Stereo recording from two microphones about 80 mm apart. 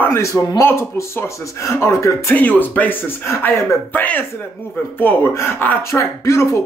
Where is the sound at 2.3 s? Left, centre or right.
Left.